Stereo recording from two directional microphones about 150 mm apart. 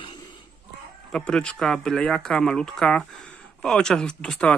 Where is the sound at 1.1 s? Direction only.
5° left (ahead or behind).